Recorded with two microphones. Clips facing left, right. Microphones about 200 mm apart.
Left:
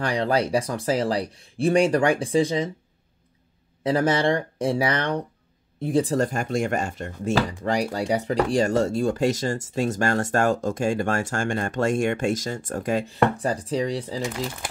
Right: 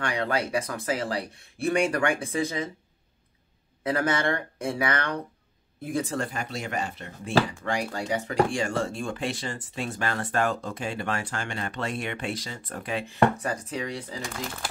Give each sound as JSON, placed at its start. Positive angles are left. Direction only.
{"t": 0.0, "sound": "speech", "side_deg": 35}
{"t": 3.8, "sound": "speech", "side_deg": 30}
{"t": 13.4, "sound": "speech", "side_deg": 35}